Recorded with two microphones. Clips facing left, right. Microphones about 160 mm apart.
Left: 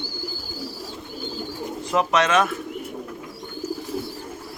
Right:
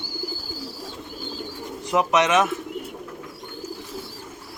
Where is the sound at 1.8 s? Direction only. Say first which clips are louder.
Right 1 dB; 15° right (ahead or behind).